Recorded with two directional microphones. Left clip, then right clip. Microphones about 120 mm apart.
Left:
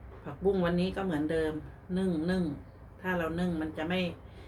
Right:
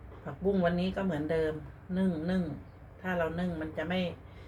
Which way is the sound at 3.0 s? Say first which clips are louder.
Even; 35° left (ahead or behind).